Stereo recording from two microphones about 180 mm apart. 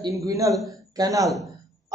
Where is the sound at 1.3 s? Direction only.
Centre (ahead or behind).